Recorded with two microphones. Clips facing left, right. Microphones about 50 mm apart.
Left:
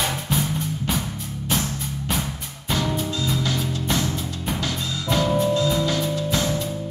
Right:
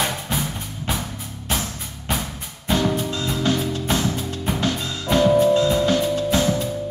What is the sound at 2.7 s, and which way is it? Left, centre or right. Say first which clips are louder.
Music: right 3 dB; right.